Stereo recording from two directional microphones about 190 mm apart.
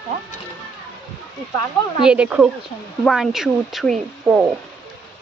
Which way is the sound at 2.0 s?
5° right (ahead or behind).